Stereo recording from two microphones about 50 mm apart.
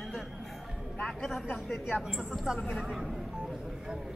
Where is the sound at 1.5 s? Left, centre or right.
Left.